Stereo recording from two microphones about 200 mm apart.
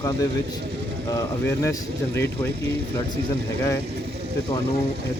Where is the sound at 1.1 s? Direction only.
15° left (ahead or behind).